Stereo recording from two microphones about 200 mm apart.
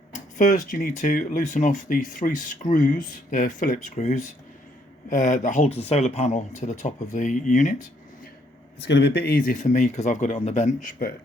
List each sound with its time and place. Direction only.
0.1 s speech: 40° left (ahead or behind)
8.8 s speech: 60° left (ahead or behind); by 11.1 s 40° left (ahead or behind)